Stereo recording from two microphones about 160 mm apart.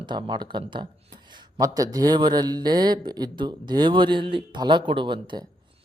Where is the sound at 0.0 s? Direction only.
30° right (ahead or behind).